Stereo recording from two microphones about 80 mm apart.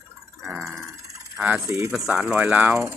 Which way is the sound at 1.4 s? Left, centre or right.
Centre.